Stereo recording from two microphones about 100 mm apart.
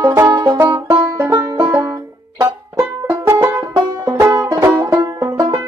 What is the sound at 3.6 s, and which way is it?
Music, 25° right (ahead or behind).